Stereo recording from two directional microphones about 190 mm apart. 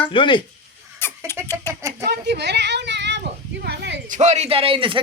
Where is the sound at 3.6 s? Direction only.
60° right (ahead or behind).